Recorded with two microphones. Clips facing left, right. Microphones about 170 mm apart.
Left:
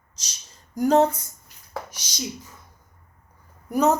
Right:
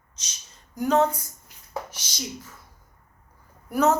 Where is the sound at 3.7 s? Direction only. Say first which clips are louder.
Left 1 dB; 15° left (ahead or behind).